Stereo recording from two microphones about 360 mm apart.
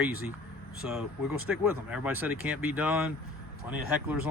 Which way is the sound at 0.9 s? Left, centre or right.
Centre.